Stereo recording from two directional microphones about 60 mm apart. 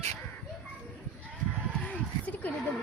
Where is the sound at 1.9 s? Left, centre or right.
Left.